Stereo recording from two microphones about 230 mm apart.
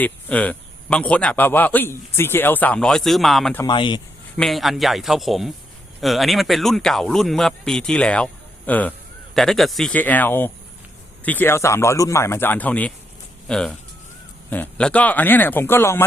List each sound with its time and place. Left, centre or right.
0.0 s speech: centre
3.6 s speech: centre
4.4 s speech: centre